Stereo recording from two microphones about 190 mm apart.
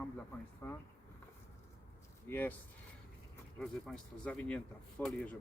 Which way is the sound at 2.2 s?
10° left (ahead or behind).